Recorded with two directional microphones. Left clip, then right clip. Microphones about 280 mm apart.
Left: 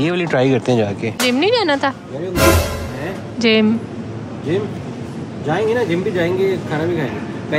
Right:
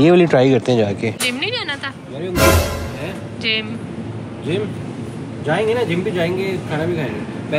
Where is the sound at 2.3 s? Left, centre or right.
Centre.